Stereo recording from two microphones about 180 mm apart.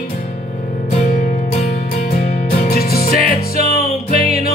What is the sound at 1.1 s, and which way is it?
Music, 45° left (ahead or behind).